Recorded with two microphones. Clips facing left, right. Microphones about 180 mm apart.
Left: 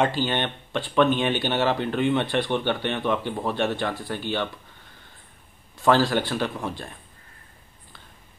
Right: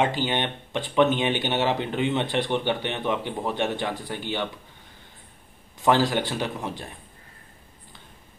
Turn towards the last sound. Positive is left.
turn(degrees=-20)  # may be behind; listen again after turning